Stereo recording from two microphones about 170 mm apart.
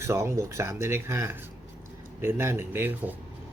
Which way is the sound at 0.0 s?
15° right (ahead or behind).